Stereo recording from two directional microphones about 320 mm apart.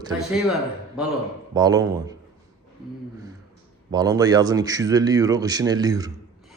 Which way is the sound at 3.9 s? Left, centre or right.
Centre.